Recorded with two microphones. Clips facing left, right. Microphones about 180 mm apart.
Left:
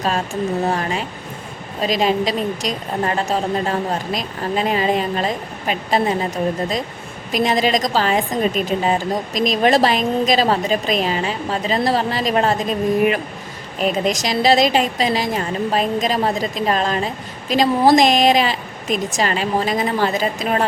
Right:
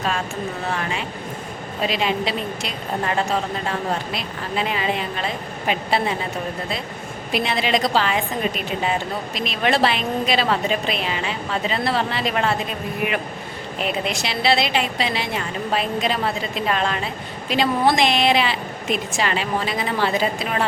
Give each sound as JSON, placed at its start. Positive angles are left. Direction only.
{"t": 0.6, "sound": "a woman's voice", "side_deg": 40}
{"t": 7.3, "sound": "a woman's voice", "side_deg": 40}